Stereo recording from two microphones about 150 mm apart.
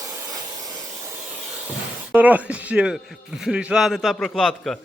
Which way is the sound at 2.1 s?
10° right (ahead or behind).